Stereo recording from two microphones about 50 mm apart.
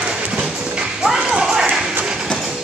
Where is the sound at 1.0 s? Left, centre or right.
Centre.